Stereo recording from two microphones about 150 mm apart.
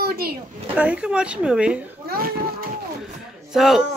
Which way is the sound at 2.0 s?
80° right.